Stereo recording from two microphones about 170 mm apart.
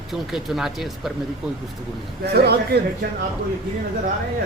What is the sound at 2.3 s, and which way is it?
Speech, 70° right (ahead or behind).